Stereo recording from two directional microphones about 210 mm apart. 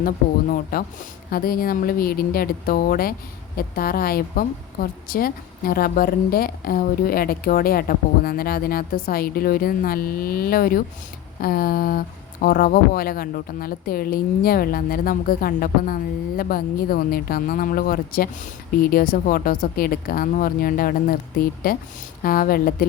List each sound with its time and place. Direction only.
0.5 s a woman's voice: 45° left (ahead or behind)